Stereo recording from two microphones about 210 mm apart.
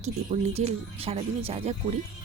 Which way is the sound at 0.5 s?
30° right (ahead or behind).